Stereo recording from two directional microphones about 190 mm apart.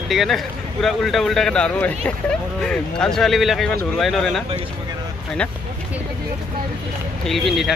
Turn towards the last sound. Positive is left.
turn(degrees=0)  # may be behind; listen again after turning